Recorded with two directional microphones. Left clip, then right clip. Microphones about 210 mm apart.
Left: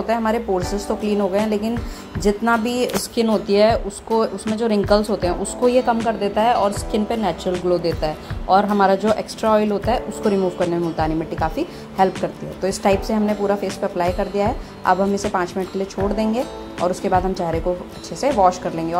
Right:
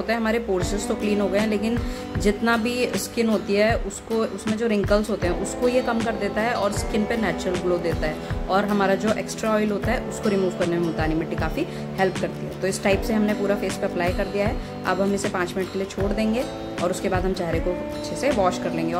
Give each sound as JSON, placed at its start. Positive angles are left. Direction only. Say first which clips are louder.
{"t": 0.0, "sound": "speech", "louder": "left 4 dB", "side_deg": 0}
{"t": 0.6, "sound": "a woman's voice", "louder": "left 3 dB", "side_deg": -20}
{"t": 1.0, "sound": "speech", "louder": "left 3 dB", "side_deg": 0}
{"t": 2.2, "sound": "speech", "louder": "left 4 dB", "side_deg": -15}
{"t": 2.6, "sound": "speech", "louder": "left 3 dB", "side_deg": 0}
{"t": 18.2, "sound": "speech", "louder": "left 6 dB", "side_deg": 0}